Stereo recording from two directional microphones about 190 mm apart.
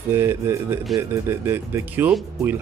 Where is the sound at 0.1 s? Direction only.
15° right (ahead or behind).